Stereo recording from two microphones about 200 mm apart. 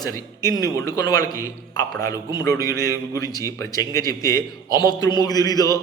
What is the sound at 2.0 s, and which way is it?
A man's voice, 20° left (ahead or behind).